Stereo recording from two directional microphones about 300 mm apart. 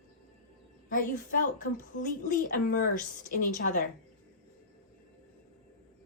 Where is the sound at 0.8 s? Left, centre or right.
Left.